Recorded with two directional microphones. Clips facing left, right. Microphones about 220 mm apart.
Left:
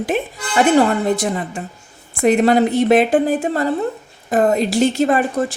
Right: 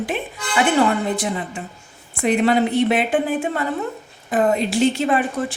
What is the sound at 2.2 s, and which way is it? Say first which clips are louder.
A woman's voice: left 4 dB; 45° left (ahead or behind).